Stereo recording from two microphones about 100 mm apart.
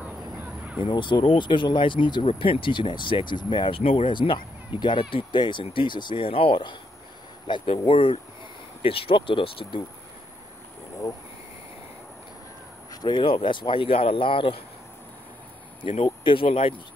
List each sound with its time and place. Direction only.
0.0 s a sound: 15° right (ahead or behind)
0.7 s speech: 55° left (ahead or behind)
2.2 s speech: 70° left (ahead or behind); by 7.7 s 50° left (ahead or behind)
7.7 s speech: 65° left (ahead or behind)
11.0 s speech: 40° left (ahead or behind)
12.9 s a sound: 40° left (ahead or behind)
13.2 s speech: 60° left (ahead or behind)
15.8 s speech: 65° left (ahead or behind)